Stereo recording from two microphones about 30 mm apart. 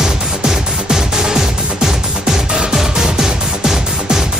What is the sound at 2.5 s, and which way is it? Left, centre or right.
Music, right.